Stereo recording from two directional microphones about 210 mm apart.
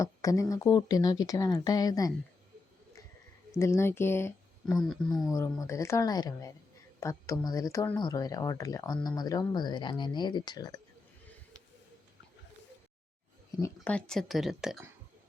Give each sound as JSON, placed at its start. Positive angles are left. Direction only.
{"t": 0.0, "sound": "speech", "side_deg": 15}
{"t": 3.6, "sound": "speech", "side_deg": 15}
{"t": 4.9, "sound": "speech", "side_deg": 0}
{"t": 5.3, "sound": "speech", "side_deg": 15}
{"t": 13.7, "sound": "speech", "side_deg": 5}